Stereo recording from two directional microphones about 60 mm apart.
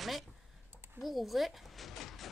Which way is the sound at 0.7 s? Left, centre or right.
Right.